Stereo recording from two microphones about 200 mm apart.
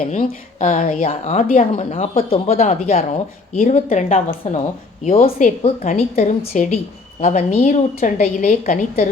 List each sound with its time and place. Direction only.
0.0 s a woman's voice: 35° left (ahead or behind)